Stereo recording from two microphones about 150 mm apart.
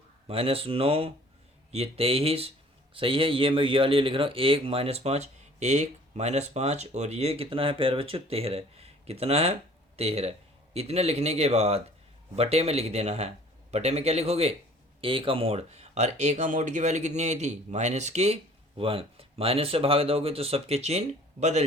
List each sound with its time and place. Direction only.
0.3 s speech: 40° right (ahead or behind)